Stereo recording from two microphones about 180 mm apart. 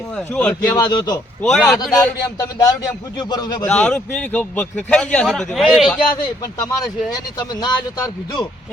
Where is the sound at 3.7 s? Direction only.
5° left (ahead or behind).